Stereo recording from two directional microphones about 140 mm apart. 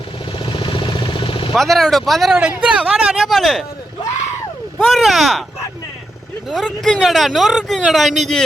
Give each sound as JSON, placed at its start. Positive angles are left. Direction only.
{"t": 0.3, "sound": "vehicle", "side_deg": 35}
{"t": 1.5, "sound": "speech", "side_deg": 0}
{"t": 4.8, "sound": "speech", "side_deg": 0}
{"t": 6.5, "sound": "speech", "side_deg": 0}